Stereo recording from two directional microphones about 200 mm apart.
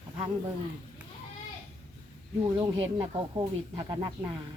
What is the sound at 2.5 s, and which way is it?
Speech, 20° right (ahead or behind).